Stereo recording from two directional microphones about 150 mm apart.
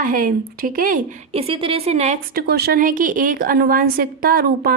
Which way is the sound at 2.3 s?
90° right.